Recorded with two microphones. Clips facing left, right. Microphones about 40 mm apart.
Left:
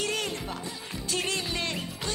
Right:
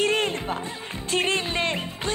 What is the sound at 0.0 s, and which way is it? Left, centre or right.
Music, right.